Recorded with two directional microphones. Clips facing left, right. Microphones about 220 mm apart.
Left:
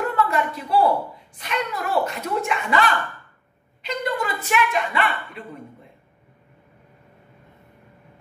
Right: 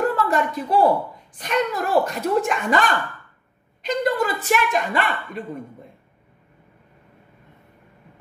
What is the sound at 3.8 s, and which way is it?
Speech, 40° right (ahead or behind).